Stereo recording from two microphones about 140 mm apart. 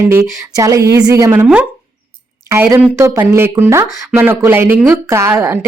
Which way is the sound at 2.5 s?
15° right (ahead or behind).